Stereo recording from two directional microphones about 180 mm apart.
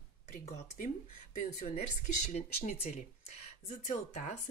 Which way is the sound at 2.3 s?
40° left (ahead or behind).